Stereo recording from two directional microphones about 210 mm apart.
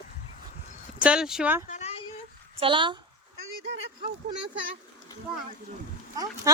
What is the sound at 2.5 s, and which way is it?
Speech, 25° right (ahead or behind).